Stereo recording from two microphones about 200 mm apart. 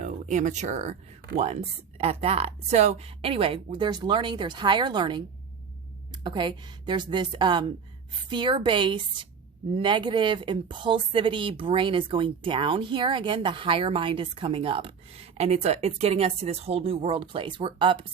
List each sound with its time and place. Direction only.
0.0 s speech: 40° right (ahead or behind)
2.0 s speech: 30° right (ahead or behind)